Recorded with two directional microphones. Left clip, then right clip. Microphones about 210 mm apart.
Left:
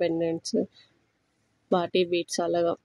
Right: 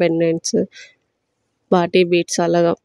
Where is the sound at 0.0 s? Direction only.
35° right (ahead or behind).